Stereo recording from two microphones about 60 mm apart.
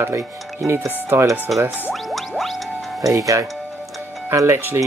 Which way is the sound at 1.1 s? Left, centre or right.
Right.